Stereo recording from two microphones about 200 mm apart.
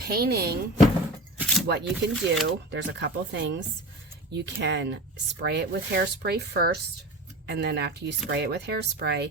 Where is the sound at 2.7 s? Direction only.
60° right (ahead or behind).